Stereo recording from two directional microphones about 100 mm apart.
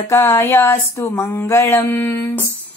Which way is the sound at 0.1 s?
25° left (ahead or behind).